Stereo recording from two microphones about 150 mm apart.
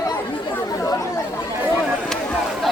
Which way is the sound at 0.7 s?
25° left (ahead or behind).